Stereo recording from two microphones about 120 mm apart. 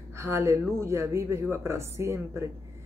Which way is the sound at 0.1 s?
25° right (ahead or behind).